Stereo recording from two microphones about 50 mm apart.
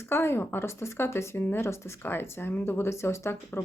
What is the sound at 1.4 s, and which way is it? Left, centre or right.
Speech, left.